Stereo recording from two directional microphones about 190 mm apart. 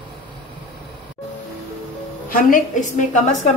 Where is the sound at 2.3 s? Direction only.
45° left (ahead or behind).